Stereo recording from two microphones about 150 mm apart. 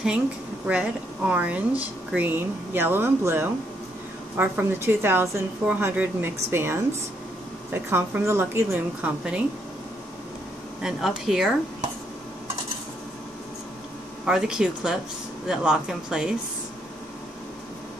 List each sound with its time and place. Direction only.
0.7 s a woman's voice: 10° right (ahead or behind)
10.8 s speech: 5° right (ahead or behind)
14.2 s speech: 5° right (ahead or behind)